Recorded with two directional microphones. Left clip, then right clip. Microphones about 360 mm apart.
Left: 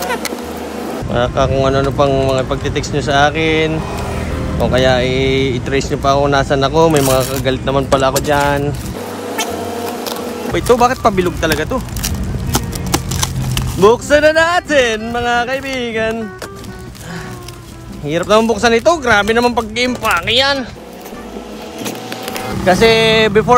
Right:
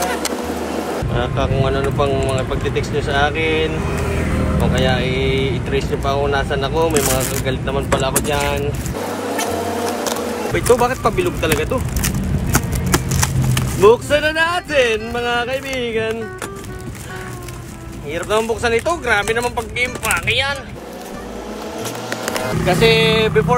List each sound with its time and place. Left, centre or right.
0.0 s vehicle: centre
1.1 s speech: left
4.7 s speech: left
10.5 s speech: left
13.7 s speech: left
18.1 s speech: left
21.8 s patter: centre
22.7 s speech: left